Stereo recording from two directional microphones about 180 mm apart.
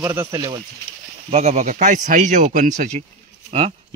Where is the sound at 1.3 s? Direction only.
35° right (ahead or behind).